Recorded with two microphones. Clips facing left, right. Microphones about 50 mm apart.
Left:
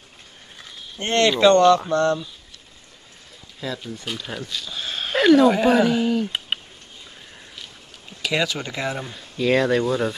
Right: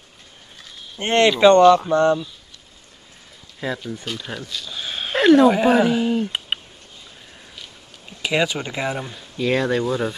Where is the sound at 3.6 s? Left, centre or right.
Right.